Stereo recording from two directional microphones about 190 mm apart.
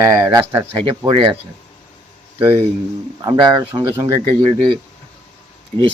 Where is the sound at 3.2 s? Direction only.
20° right (ahead or behind).